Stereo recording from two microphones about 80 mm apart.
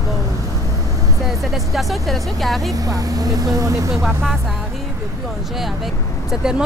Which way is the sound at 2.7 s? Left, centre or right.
Right.